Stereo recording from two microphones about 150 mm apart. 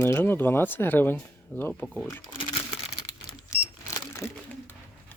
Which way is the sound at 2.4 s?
40° left (ahead or behind).